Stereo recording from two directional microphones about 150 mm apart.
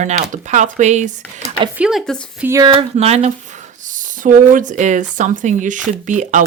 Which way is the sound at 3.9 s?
60° right (ahead or behind).